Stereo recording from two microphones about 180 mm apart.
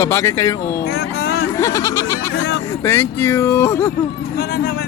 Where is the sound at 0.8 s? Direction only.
60° left (ahead or behind).